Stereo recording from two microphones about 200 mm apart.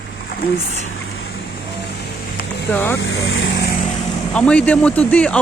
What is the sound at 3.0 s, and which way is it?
Speech, 75° left (ahead or behind).